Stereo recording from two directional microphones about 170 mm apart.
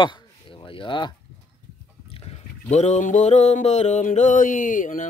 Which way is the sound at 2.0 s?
35° left (ahead or behind).